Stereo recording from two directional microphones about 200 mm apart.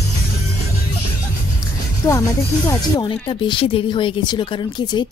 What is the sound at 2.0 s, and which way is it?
Speech, 10° left (ahead or behind).